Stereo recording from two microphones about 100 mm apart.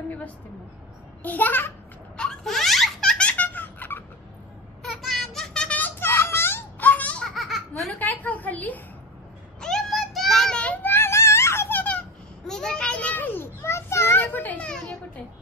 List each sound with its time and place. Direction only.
1.2 s a child's voice: 15° left (ahead or behind)
2.1 s baby laughter: 5° left (ahead or behind)
4.8 s a sound: centre (ahead or behind)
7.9 s a sound: 15° left (ahead or behind)
9.6 s child singing: 5° left (ahead or behind)
12.4 s children playing: 5° left (ahead or behind)